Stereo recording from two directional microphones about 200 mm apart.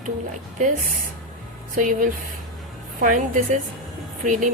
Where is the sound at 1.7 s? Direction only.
40° right (ahead or behind).